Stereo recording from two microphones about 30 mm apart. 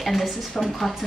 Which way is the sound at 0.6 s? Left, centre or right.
Centre.